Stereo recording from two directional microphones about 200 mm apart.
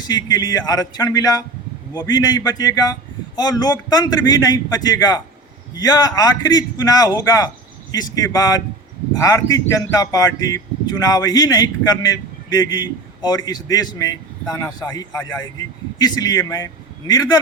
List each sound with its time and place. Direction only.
0.1 s speech: 20° left (ahead or behind)